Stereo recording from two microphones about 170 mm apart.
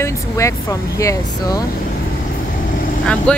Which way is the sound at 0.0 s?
15° left (ahead or behind).